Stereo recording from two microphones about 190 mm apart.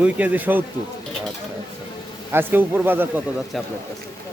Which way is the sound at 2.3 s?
10° right (ahead or behind).